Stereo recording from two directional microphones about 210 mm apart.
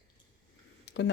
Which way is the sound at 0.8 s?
60° left (ahead or behind).